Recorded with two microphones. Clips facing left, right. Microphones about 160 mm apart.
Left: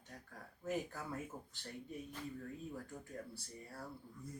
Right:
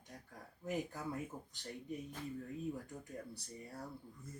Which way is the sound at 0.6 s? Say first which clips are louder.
Right 1 dB; 15° right (ahead or behind).